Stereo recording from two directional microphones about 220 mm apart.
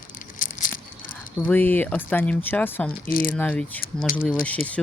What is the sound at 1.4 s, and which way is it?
Speech, 10° left (ahead or behind).